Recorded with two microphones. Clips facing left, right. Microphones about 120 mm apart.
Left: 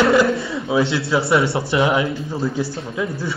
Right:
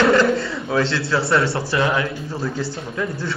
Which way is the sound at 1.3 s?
20° left (ahead or behind).